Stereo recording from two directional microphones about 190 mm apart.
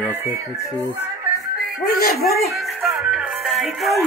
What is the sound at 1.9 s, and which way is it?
Speech, 50° left (ahead or behind).